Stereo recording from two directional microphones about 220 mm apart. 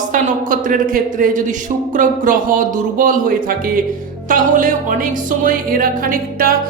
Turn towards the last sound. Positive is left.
turn(degrees=-40)  # may be behind; listen again after turning